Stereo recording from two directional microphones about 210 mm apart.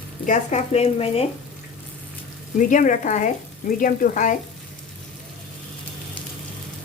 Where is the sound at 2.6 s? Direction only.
40° left (ahead or behind).